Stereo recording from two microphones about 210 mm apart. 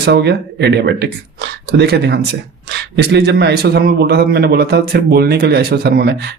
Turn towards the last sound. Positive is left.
turn(degrees=-50)  # may be behind; listen again after turning